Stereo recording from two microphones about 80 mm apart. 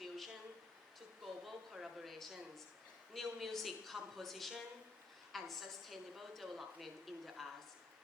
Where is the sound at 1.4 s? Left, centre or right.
Centre.